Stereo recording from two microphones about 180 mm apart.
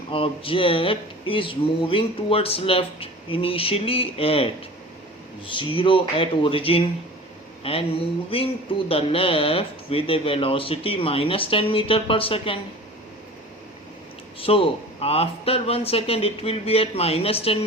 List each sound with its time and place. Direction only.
0.1 s speech: 30° left (ahead or behind)
14.4 s speech: 30° left (ahead or behind)